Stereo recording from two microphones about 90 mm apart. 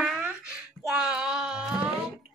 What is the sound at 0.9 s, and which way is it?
Child singing, 5° right (ahead or behind).